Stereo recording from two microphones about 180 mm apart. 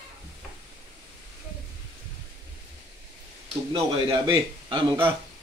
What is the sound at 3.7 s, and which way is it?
A man's voice, 25° right (ahead or behind).